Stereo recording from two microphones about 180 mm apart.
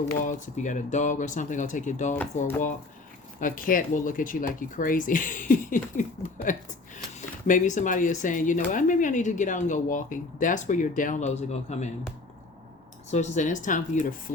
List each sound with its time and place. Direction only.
0.2 s speech: 45° left (ahead or behind)
13.1 s speech: 40° left (ahead or behind)